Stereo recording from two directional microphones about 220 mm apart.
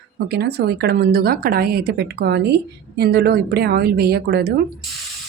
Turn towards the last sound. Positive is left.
turn(degrees=-45)  # may be behind; listen again after turning